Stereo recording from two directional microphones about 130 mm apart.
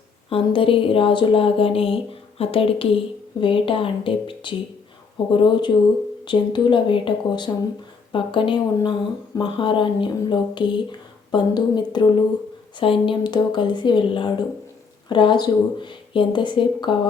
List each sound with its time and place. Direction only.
0.3 s speech: 45° left (ahead or behind)